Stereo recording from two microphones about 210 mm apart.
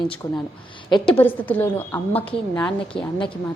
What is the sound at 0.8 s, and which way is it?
Speech, 20° left (ahead or behind).